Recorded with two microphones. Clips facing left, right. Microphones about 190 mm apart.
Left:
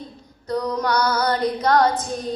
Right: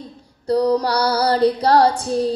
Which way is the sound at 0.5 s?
35° right (ahead or behind).